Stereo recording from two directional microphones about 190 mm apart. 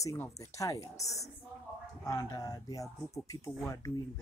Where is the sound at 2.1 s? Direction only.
20° left (ahead or behind).